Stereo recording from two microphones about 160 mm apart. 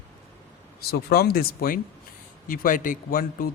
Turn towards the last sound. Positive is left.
turn(degrees=65)  # may be behind; listen again after turning